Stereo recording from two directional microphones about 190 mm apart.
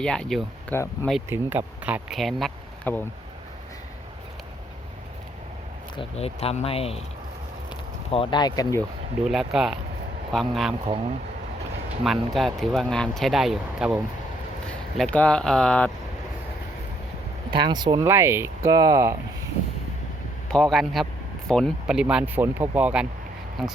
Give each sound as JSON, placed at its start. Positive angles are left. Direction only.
{"t": 0.0, "sound": "speech", "side_deg": 5}
{"t": 1.3, "sound": "speech", "side_deg": -10}
{"t": 6.0, "sound": "speech", "side_deg": 30}
{"t": 9.2, "sound": "speech", "side_deg": 0}
{"t": 12.0, "sound": "speech", "side_deg": 0}
{"t": 14.9, "sound": "speech", "side_deg": 5}
{"t": 17.5, "sound": "speech", "side_deg": -25}
{"t": 20.5, "sound": "speech", "side_deg": 0}